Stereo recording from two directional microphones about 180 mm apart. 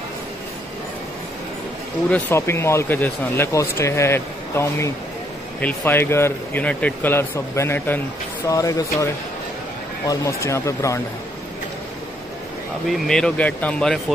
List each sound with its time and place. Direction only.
2.0 s speech: 10° left (ahead or behind)
12.9 s speech: centre (ahead or behind)